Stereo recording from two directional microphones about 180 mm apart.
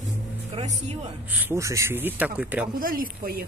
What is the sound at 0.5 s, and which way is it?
Speech, 30° right (ahead or behind).